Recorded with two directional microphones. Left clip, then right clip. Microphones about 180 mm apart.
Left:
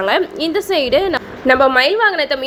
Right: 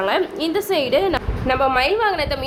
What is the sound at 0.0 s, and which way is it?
A woman's voice, 20° left (ahead or behind).